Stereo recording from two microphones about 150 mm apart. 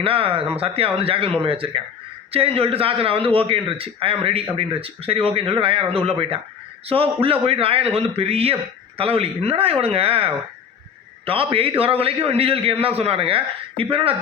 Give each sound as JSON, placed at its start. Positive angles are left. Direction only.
{"t": 0.0, "sound": "a man's voice", "side_deg": -40}